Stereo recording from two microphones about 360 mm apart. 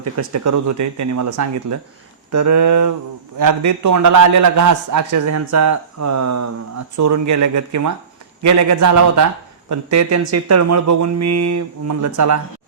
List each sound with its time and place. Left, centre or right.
0.0 s a man's voice: right